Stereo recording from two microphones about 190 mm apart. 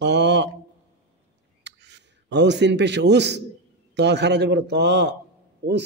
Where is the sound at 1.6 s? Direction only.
65° right (ahead or behind).